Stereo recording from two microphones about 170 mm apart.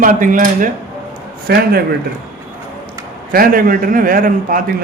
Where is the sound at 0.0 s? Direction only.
50° right (ahead or behind).